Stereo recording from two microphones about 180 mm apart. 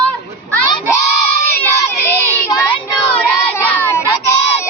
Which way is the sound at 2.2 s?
15° left (ahead or behind).